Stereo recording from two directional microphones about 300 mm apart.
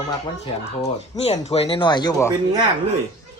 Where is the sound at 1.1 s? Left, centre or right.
Left.